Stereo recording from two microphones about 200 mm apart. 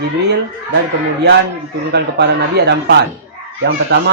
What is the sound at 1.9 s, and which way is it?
Speech, 55° right (ahead or behind).